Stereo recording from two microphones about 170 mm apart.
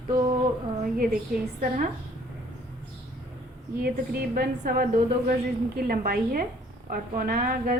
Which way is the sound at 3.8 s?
60° right (ahead or behind).